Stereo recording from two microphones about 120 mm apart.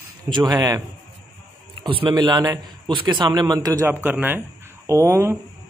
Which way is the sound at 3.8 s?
15° right (ahead or behind).